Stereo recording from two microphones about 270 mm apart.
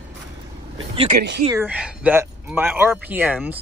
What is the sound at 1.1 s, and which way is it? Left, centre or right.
Speech, right.